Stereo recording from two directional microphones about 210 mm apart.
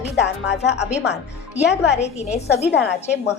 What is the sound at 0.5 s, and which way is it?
Speech, 55° left (ahead or behind).